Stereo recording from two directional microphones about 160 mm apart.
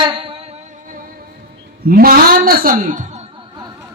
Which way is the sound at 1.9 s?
65° right (ahead or behind).